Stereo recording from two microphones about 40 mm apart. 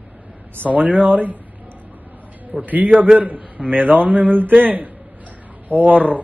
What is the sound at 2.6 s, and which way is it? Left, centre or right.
A man's voice, right.